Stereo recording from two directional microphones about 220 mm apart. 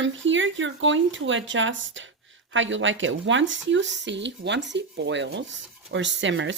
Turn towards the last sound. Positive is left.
turn(degrees=-55)  # may be behind; listen again after turning